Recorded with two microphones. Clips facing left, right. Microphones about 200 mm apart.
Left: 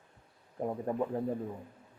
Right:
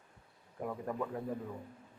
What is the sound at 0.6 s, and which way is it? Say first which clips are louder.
Speech: left 5 dB; 30° left (ahead or behind).